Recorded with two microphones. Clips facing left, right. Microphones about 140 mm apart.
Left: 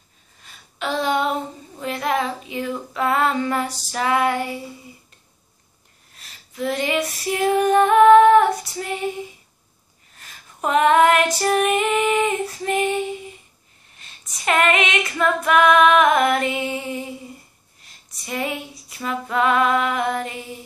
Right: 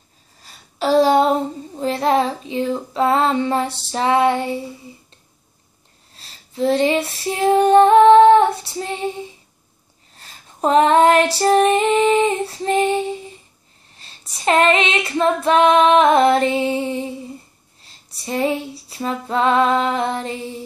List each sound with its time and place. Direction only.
0.4 s child singing: 35° right (ahead or behind)
6.1 s female singing: 30° right (ahead or behind)